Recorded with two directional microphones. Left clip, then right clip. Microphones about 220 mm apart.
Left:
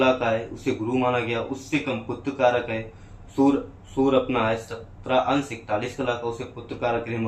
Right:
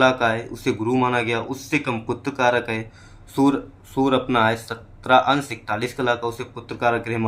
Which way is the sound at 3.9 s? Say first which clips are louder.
Right 2 dB; 55° right (ahead or behind).